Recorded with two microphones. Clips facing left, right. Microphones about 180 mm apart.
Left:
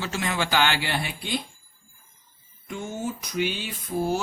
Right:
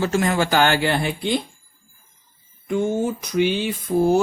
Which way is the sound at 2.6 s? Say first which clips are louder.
Right 10 dB; 55° right (ahead or behind).